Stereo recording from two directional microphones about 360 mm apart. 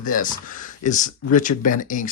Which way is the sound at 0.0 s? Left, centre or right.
Left.